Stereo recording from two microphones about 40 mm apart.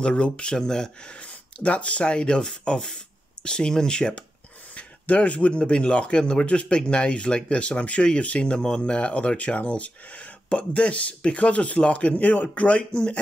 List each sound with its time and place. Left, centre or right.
0.0 s speech: left
0.7 s speech: centre
1.1 s speech: left
4.7 s a sound: left
5.6 s speech: left